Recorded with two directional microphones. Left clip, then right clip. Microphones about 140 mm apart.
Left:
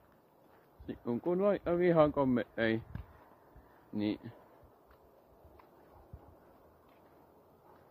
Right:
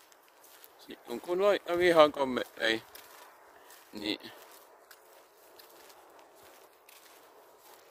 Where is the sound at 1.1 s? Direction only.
25° right (ahead or behind).